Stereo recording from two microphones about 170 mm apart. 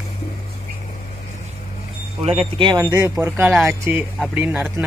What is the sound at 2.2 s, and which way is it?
Speech, 35° right (ahead or behind).